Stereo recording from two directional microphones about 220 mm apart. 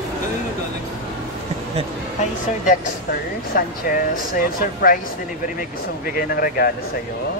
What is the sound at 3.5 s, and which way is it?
Speech, 40° left (ahead or behind).